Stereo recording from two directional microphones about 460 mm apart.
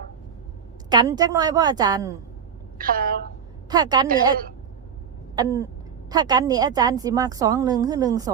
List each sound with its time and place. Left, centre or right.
0.9 s a woman's voice: centre
2.7 s a woman's voice: centre